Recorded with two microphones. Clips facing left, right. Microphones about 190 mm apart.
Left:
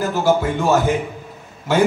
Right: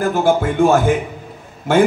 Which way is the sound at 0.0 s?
50° right (ahead or behind).